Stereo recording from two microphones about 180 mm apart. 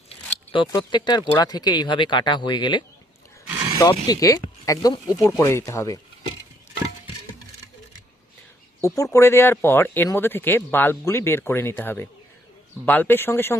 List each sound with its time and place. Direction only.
0.5 s speech: 25° left (ahead or behind)
3.4 s a sound: 10° right (ahead or behind)
3.8 s speech: 20° left (ahead or behind)
9.1 s speech: 15° left (ahead or behind)